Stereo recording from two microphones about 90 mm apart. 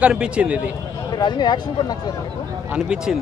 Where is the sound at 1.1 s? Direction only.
55° left (ahead or behind).